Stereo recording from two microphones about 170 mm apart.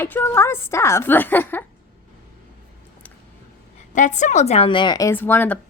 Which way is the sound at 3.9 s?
45° left (ahead or behind).